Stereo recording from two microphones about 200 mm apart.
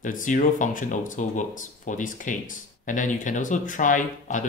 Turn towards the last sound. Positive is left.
turn(degrees=40)  # may be behind; listen again after turning